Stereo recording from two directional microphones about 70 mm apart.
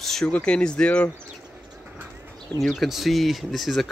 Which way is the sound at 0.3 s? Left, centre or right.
Centre.